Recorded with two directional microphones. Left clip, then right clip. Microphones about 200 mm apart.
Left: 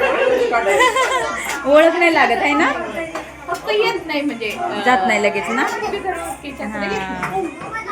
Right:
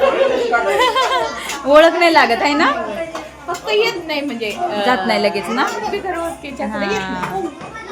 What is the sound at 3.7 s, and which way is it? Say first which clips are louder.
Speech: right 1 dB; 50° right (ahead or behind).